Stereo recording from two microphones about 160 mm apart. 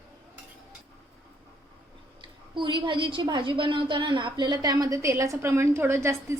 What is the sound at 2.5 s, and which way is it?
A woman's voice, 30° right (ahead or behind).